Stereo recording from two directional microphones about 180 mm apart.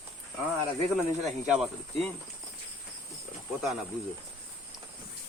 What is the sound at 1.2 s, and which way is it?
Speech, 5° right (ahead or behind).